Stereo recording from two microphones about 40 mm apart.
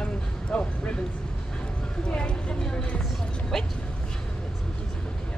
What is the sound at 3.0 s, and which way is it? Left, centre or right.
Speech, centre.